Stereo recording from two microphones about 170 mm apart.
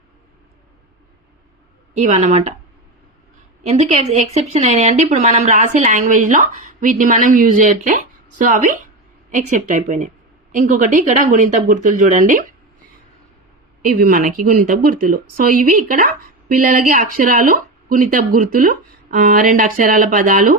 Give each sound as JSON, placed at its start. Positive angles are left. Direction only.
{"t": 2.0, "sound": "speech", "side_deg": -45}
{"t": 3.6, "sound": "speech", "side_deg": -40}
{"t": 13.8, "sound": "speech", "side_deg": -55}